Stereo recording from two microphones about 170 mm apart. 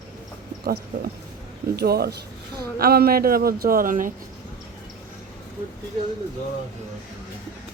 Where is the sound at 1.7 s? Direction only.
70° right (ahead or behind); by 4.1 s 50° right (ahead or behind).